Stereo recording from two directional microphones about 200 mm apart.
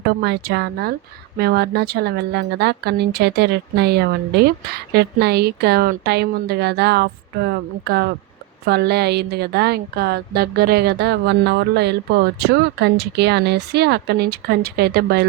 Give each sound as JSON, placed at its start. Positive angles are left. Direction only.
{"t": 0.2, "sound": "speech", "side_deg": -55}